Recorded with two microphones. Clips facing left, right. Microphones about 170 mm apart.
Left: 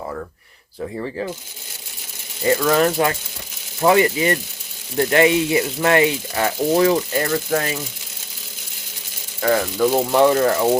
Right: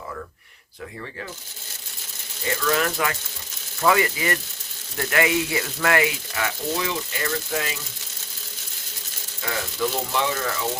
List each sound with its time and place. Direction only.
2.6 s speech: 35° left (ahead or behind)
9.4 s speech: 55° left (ahead or behind)